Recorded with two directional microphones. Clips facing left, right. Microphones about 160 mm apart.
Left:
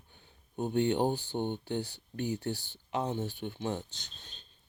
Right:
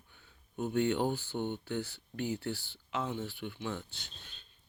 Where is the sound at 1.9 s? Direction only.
40° left (ahead or behind).